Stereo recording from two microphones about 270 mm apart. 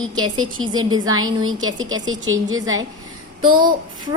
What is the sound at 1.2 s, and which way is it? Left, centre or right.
A woman's voice, right.